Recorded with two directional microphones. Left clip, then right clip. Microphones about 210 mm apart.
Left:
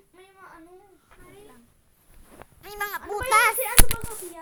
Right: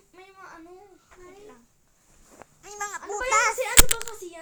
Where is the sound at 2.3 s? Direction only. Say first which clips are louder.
Left 2 dB; 30° left (ahead or behind).